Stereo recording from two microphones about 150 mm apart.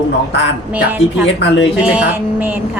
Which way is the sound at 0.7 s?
10° right (ahead or behind).